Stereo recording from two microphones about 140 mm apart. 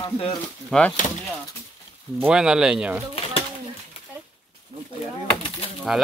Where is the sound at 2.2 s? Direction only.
5° right (ahead or behind).